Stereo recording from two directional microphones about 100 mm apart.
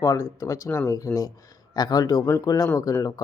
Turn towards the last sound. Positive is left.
turn(degrees=35)  # may be behind; listen again after turning